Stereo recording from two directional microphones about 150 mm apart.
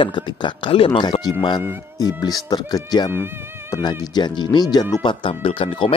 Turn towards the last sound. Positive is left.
turn(degrees=35)  # may be behind; listen again after turning